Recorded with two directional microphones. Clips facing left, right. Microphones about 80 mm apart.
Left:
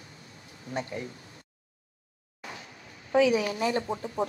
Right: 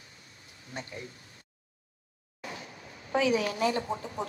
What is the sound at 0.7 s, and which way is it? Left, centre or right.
Speech, left.